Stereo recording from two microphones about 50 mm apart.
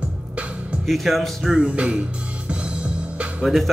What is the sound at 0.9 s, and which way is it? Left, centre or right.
Speech, centre.